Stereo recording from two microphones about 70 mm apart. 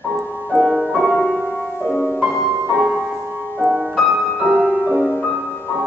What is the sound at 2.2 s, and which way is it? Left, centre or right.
Music, centre.